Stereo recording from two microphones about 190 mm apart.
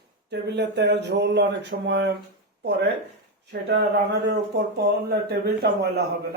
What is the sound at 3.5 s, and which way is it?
Speech, 60° right (ahead or behind).